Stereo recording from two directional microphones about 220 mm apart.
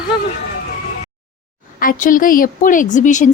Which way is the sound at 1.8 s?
40° left (ahead or behind).